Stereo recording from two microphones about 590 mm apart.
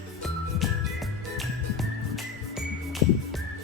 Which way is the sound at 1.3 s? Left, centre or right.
Centre.